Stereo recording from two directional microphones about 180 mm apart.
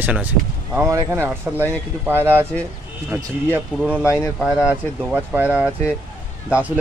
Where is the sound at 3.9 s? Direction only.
5° right (ahead or behind).